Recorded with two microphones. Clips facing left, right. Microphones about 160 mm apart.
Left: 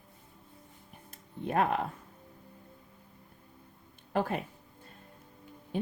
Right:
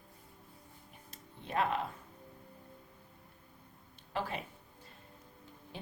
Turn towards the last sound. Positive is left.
turn(degrees=50)  # may be behind; listen again after turning